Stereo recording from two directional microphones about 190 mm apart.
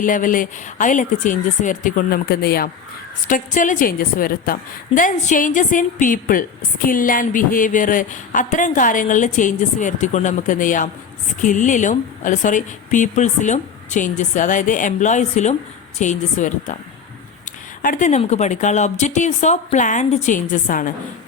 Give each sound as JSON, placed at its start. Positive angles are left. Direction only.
{"t": 0.0, "sound": "a woman's voice", "side_deg": 45}
{"t": 3.2, "sound": "a woman's voice", "side_deg": 45}
{"t": 17.8, "sound": "a woman's voice", "side_deg": 40}